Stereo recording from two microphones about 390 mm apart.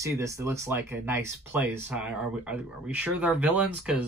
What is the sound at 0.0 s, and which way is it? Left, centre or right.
Speech, centre.